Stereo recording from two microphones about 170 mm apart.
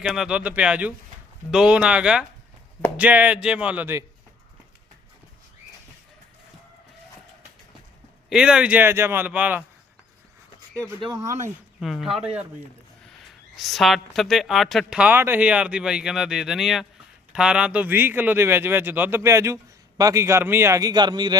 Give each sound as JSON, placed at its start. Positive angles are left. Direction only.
{"t": 0.0, "sound": "a man's voice", "side_deg": -5}
{"t": 8.3, "sound": "a man's voice", "side_deg": -5}
{"t": 11.3, "sound": "speech", "side_deg": -45}
{"t": 11.8, "sound": "speech", "side_deg": 0}
{"t": 13.6, "sound": "a man's voice", "side_deg": 0}